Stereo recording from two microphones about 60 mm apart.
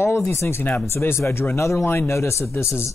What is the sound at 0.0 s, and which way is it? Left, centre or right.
Speech, left.